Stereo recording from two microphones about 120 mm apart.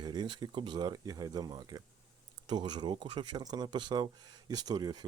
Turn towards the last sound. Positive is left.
turn(degrees=-35)  # may be behind; listen again after turning